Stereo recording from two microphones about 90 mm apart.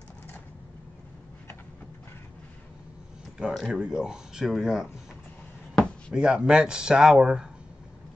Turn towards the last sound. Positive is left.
turn(degrees=-5)  # may be behind; listen again after turning